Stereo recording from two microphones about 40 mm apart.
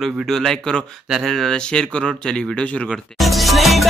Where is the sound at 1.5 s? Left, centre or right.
Left.